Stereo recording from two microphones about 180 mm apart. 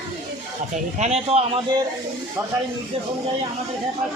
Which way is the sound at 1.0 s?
35° right (ahead or behind).